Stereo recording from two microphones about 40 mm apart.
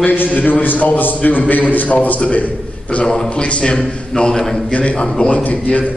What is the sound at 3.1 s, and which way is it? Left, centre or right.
A man's voice, left.